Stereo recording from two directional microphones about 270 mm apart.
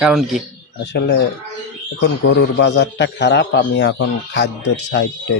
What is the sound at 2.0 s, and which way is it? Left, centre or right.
A man's voice, left.